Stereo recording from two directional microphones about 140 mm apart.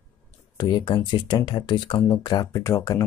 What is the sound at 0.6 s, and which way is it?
Speech, 35° left (ahead or behind).